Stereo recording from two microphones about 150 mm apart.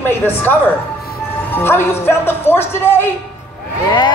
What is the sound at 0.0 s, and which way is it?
Speech, 15° left (ahead or behind).